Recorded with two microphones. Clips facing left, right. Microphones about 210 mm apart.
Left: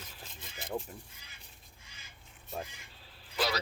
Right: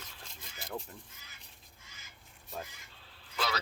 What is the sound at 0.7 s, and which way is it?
Speech, 5° left (ahead or behind).